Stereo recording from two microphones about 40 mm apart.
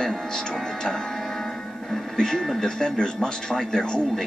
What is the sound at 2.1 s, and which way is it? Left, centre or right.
Speech, centre.